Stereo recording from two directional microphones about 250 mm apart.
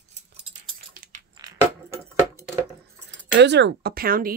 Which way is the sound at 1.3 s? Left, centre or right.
Centre.